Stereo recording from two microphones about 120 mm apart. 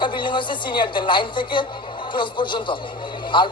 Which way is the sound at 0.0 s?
40° left (ahead or behind).